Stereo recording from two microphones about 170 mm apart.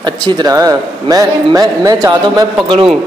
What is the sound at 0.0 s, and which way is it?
A man's voice, 25° right (ahead or behind).